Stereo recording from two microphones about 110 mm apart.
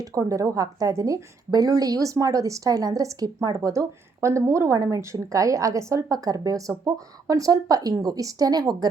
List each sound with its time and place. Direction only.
0.0 s a woman's voice: 30° right (ahead or behind)